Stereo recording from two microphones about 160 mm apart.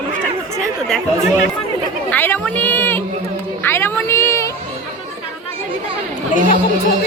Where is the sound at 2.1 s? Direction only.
10° left (ahead or behind).